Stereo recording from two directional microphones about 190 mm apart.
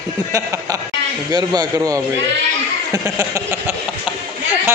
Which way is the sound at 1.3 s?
20° right (ahead or behind).